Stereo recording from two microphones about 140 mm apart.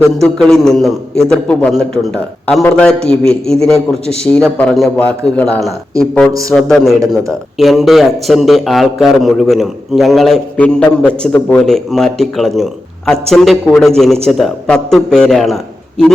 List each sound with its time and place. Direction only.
0.1 s a man's voice: centre (ahead or behind)